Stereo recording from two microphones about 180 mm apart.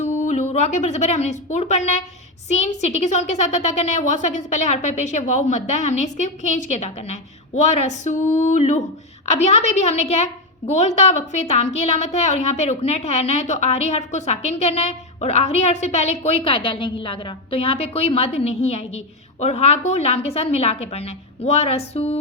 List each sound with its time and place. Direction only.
0.0 s a woman's voice: 40° left (ahead or behind)